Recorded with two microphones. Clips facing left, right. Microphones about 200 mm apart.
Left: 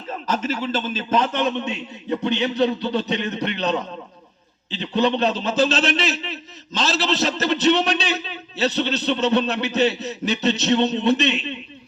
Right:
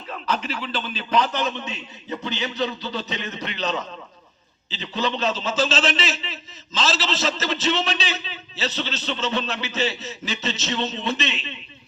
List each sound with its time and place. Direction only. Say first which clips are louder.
0.1 s a man's voice: left 3 dB; 45° left (ahead or behind)
1.4 s a man's voice: left 5 dB; 60° left (ahead or behind)